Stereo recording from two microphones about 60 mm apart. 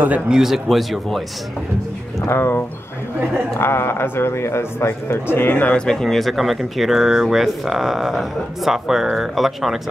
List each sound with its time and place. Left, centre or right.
0.3 s speech: centre
2.2 s a man's voice: left
5.7 s speech: centre